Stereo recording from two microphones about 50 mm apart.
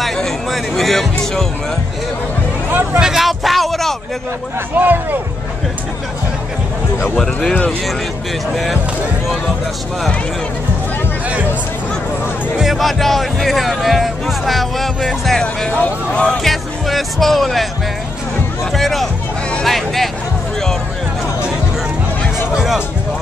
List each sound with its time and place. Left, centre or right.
0.0 s speech: centre
2.7 s speech: right
3.0 s a sound: centre
4.7 s speech: right
12.7 s speech: centre
15.8 s speech: left
16.4 s speech: centre
18.7 s speech: centre